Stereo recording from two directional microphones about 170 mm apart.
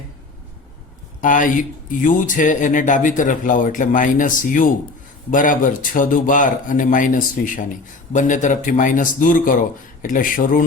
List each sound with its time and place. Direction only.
1.2 s speech: 50° left (ahead or behind)